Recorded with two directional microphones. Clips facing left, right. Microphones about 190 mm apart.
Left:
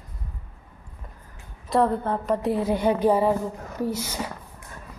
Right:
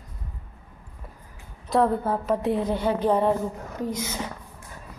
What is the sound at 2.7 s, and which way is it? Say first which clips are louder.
Speech: left 4 dB; 15° left (ahead or behind).